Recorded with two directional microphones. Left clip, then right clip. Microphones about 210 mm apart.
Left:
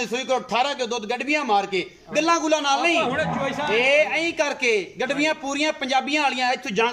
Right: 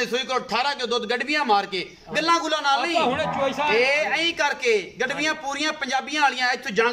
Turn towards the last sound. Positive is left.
turn(degrees=15)  # may be behind; listen again after turning